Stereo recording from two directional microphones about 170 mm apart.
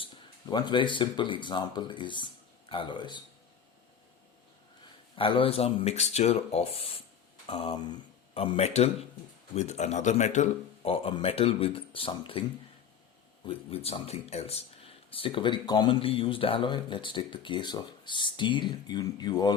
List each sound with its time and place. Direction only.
0.0 s speech: 25° left (ahead or behind)
5.1 s speech: 30° left (ahead or behind)
13.5 s speech: 35° left (ahead or behind)